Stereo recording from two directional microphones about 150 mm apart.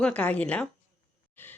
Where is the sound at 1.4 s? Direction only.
10° left (ahead or behind).